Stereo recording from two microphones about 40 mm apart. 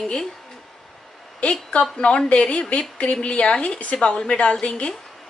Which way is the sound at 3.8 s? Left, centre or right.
Left.